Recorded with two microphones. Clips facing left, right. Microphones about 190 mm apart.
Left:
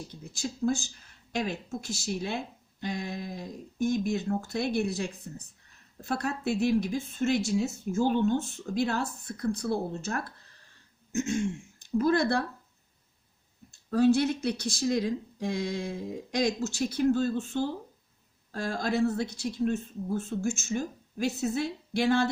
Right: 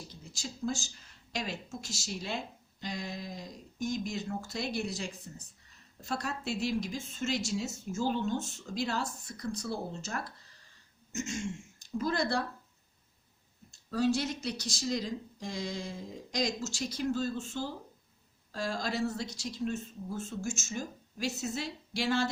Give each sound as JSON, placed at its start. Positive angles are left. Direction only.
{"t": 0.1, "sound": "a woman's voice", "side_deg": 55}
{"t": 13.7, "sound": "a woman's voice", "side_deg": 55}